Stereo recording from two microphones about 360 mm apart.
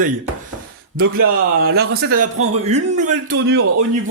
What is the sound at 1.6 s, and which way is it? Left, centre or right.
Speech, right.